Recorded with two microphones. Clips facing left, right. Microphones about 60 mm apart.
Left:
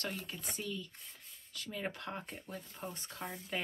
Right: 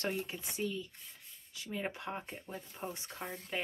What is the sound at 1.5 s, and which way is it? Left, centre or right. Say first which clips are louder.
Speech: right 1 dB; centre.